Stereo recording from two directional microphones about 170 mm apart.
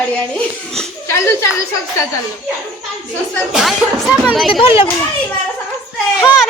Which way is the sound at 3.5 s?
Centre (ahead or behind).